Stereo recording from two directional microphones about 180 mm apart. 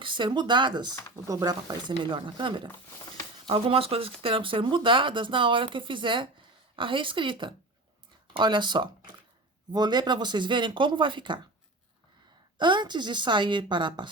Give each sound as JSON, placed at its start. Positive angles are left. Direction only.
{"t": 0.0, "sound": "speech", "side_deg": -25}
{"t": 12.5, "sound": "speech", "side_deg": -25}